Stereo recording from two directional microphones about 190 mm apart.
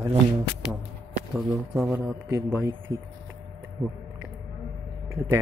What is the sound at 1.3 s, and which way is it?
Speech, centre (ahead or behind).